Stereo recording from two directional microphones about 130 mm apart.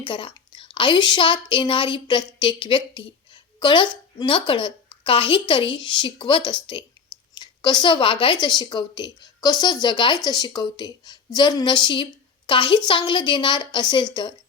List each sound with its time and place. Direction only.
0.0 s a woman's voice: 40° left (ahead or behind)